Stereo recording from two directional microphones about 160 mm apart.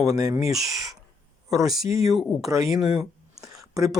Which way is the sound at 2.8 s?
5° right (ahead or behind).